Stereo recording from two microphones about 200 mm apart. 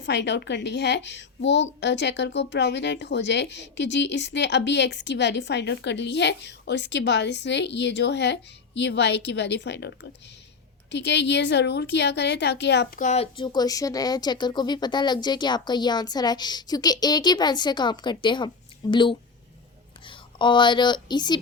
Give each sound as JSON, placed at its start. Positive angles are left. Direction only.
{"t": 0.0, "sound": "a child's voice", "side_deg": 60}
{"t": 13.0, "sound": "a woman's voice", "side_deg": 35}